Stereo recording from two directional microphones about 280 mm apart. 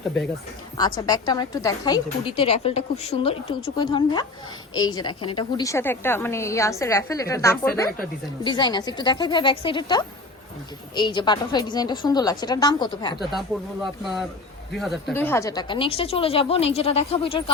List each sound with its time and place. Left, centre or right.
0.8 s a woman's voice: centre
13.8 s speech: centre